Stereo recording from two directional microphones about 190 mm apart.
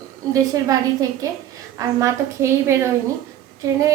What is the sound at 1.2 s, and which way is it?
A woman's voice, 20° right (ahead or behind).